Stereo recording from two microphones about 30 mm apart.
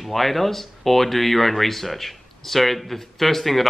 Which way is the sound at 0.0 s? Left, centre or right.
Centre.